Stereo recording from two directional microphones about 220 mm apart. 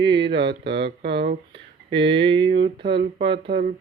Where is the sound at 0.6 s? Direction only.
50° right (ahead or behind).